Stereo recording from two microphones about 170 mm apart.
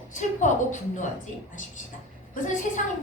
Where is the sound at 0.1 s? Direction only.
45° left (ahead or behind).